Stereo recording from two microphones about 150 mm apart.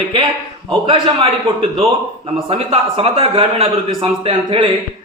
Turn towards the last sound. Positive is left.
turn(degrees=-35)  # may be behind; listen again after turning